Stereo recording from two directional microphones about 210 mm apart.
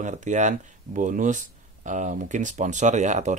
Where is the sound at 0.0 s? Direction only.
35° right (ahead or behind).